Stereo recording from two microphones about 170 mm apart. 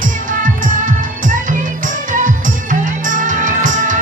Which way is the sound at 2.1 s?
50° right (ahead or behind).